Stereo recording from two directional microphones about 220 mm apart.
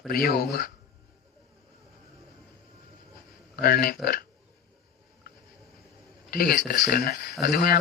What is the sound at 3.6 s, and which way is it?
Speech, 40° left (ahead or behind).